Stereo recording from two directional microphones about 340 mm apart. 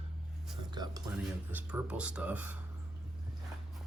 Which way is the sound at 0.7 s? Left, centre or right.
Centre.